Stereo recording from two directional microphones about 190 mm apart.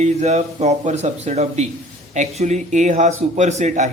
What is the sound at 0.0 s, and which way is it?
A man's voice, 35° right (ahead or behind).